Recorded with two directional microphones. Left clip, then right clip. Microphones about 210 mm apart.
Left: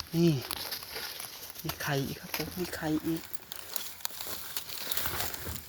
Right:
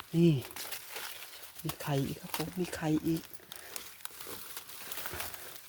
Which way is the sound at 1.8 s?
25° right (ahead or behind).